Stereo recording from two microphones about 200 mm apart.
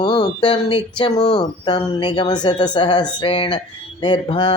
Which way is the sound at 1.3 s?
20° left (ahead or behind).